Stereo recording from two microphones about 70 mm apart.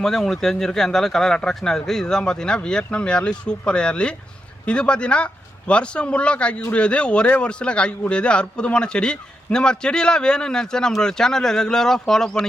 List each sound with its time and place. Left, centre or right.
0.0 s a man's voice: centre